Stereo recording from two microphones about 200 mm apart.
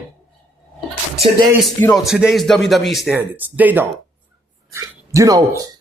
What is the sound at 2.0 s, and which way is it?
A man's voice, centre (ahead or behind).